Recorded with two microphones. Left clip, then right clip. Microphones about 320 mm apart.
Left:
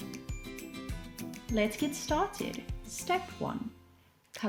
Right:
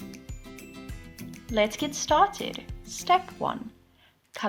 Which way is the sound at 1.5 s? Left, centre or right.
Centre.